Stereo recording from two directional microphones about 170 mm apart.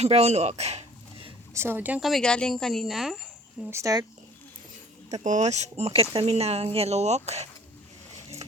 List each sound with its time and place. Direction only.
0.0 s speech: 40° right (ahead or behind)
1.5 s speech: 15° right (ahead or behind)
3.7 s speech: 20° right (ahead or behind)
5.1 s speech: 45° right (ahead or behind)
8.1 s vehicle: 40° right (ahead or behind)